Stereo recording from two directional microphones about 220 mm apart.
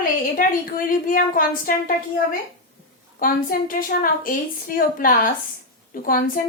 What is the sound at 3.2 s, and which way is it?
A woman's voice, 40° left (ahead or behind).